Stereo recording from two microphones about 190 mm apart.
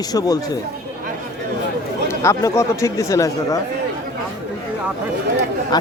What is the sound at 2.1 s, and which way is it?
Speech, 15° left (ahead or behind).